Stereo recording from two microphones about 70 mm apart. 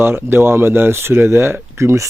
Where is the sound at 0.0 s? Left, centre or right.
Right.